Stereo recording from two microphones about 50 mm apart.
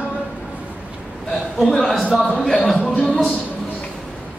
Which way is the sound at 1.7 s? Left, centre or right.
Centre.